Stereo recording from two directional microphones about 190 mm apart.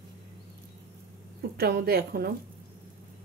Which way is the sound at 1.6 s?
55° right (ahead or behind).